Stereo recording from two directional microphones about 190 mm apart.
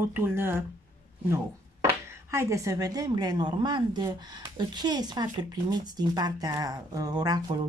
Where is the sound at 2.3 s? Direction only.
15° right (ahead or behind).